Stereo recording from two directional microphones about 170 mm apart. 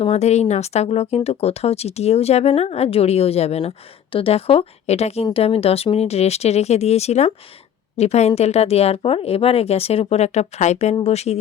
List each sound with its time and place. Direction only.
0.0 s speech: 40° left (ahead or behind)